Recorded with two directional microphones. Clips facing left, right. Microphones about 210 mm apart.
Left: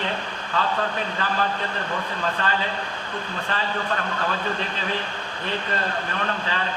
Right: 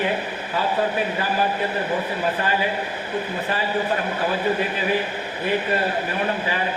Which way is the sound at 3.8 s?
20° right (ahead or behind).